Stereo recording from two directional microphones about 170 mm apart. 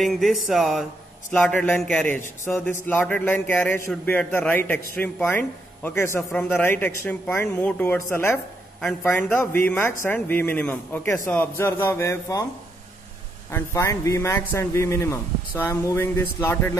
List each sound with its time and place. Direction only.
0.0 s music: centre (ahead or behind)
1.3 s a man's voice: 10° left (ahead or behind)
13.5 s a man's voice: 15° left (ahead or behind)